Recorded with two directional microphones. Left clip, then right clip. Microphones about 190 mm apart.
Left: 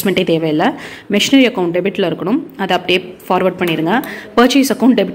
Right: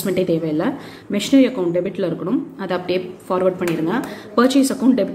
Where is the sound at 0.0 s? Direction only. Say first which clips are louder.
Left 5 dB; 35° left (ahead or behind).